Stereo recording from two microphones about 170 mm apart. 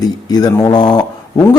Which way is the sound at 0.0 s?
20° left (ahead or behind).